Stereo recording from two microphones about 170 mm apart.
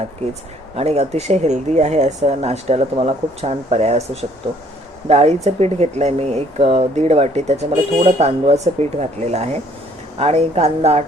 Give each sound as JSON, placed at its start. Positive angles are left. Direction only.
{"t": 0.8, "sound": "speech", "side_deg": -40}